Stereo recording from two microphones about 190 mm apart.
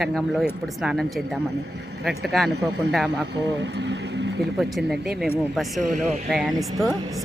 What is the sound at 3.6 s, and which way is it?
Speech, 65° right (ahead or behind).